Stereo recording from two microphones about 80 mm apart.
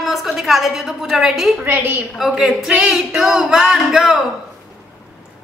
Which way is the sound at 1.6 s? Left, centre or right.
Right.